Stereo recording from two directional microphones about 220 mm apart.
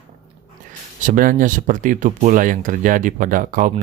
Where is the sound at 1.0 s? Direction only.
40° right (ahead or behind).